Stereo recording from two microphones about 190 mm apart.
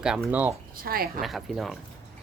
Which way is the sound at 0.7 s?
50° right (ahead or behind).